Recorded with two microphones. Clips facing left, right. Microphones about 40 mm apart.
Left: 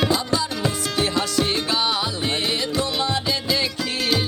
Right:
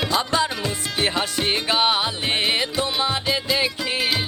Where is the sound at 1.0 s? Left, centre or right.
Right.